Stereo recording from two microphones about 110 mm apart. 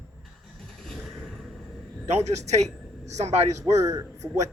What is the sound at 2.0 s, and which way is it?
Speech, 90° right.